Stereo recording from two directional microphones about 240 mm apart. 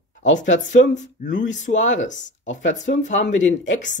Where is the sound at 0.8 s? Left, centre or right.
Left.